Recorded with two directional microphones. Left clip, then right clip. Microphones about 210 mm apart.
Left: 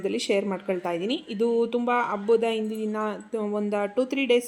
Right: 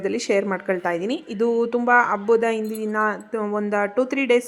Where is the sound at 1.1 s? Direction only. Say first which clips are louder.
Right 2 dB; 30° right (ahead or behind).